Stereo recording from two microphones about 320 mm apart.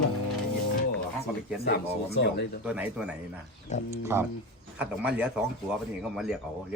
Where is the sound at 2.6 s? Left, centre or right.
Centre.